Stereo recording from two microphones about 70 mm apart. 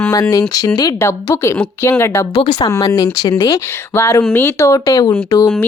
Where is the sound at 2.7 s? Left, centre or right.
Left.